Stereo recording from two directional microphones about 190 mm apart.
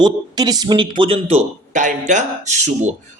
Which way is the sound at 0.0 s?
20° right (ahead or behind).